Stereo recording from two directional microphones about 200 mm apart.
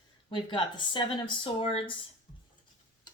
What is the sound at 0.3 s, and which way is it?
Speech, 25° left (ahead or behind).